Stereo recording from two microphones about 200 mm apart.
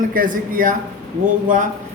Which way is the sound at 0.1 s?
45° right (ahead or behind).